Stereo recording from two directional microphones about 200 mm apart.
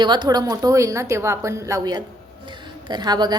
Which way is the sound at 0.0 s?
20° right (ahead or behind).